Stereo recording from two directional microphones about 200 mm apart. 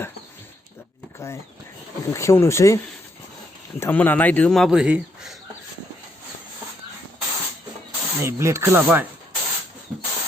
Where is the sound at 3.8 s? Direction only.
10° left (ahead or behind).